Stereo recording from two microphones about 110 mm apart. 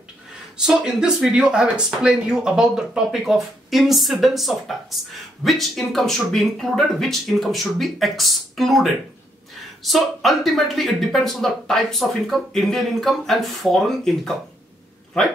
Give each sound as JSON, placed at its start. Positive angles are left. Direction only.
{"t": 0.7, "sound": "speech", "side_deg": -5}